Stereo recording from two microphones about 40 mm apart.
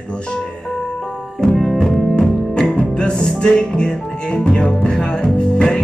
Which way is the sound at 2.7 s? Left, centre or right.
Left.